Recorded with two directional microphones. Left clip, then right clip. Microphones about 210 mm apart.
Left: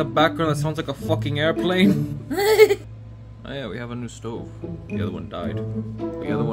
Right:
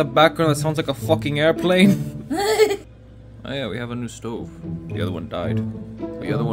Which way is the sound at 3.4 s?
20° right (ahead or behind).